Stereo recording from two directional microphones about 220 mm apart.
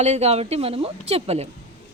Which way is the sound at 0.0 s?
30° right (ahead or behind).